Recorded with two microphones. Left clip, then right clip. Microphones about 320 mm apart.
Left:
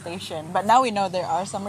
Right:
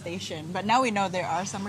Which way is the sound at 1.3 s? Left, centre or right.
Right.